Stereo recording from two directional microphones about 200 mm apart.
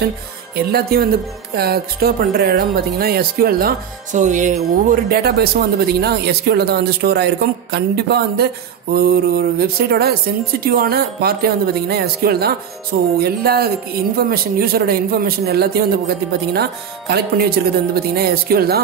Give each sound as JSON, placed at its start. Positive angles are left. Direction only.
{"t": 0.6, "sound": "speech", "side_deg": -50}